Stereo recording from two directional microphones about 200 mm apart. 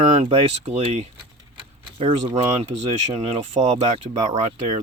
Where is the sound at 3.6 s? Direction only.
30° right (ahead or behind).